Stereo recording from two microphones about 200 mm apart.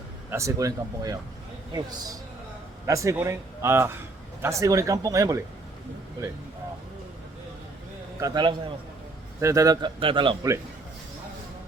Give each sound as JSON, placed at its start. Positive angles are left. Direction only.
{"t": 0.3, "sound": "a man's voice", "side_deg": -15}
{"t": 8.2, "sound": "a man's voice", "side_deg": -20}